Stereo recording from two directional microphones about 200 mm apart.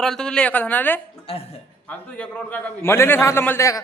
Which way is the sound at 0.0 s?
5° left (ahead or behind).